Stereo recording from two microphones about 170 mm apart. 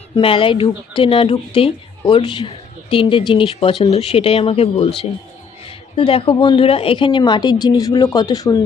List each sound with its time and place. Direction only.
0.2 s speech: 30° left (ahead or behind)
6.0 s speech: 30° left (ahead or behind)